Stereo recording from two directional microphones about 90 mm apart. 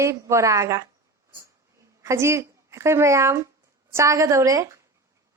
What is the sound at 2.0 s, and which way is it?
A woman's voice, 30° right (ahead or behind).